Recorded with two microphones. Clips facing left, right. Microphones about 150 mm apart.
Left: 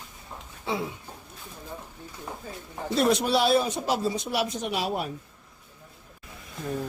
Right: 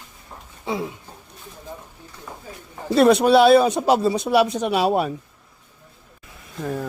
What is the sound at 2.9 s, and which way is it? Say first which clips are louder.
Speech: right 9 dB; 65° right (ahead or behind).